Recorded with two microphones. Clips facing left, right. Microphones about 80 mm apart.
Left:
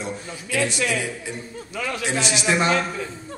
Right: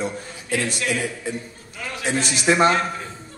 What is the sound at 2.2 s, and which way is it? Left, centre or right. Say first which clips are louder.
Speech: right 4 dB; right.